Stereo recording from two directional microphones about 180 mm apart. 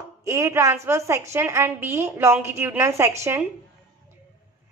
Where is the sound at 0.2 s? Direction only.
15° right (ahead or behind).